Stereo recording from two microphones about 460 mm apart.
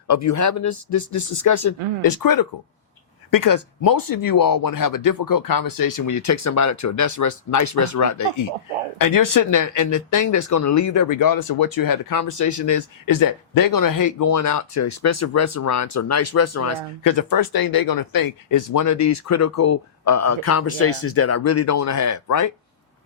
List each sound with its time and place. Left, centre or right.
0.1 s speech: left